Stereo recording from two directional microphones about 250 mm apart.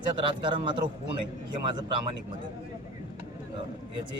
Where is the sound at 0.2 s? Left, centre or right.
Centre.